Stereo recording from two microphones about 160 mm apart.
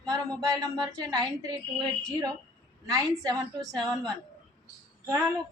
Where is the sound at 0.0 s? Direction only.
25° right (ahead or behind).